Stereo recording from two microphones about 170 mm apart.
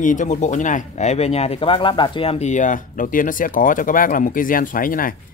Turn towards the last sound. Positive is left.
turn(degrees=55)  # may be behind; listen again after turning